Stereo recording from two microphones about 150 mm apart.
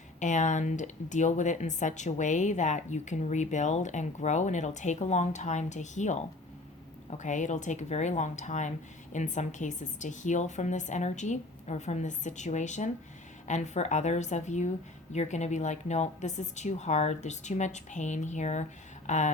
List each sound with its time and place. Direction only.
0.2 s speech: 55° left (ahead or behind)
7.2 s speech: 55° left (ahead or behind)